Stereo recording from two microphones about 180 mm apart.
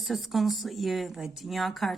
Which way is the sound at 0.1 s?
Centre (ahead or behind).